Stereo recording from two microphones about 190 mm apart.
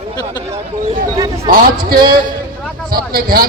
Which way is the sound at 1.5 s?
50° right (ahead or behind).